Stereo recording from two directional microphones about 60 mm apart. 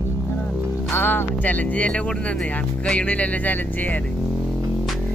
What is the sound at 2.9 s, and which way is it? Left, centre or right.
Speech, left.